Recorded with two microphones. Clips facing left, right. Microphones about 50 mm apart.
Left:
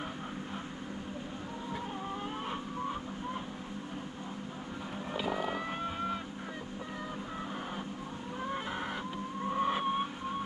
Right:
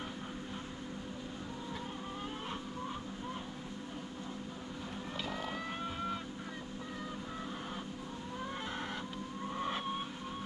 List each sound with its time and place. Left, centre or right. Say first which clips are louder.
5.1 s vehicle: left 7 dB; centre
8.5 s chicken: left 5 dB; centre
9.5 s vehicle: left 7 dB; centre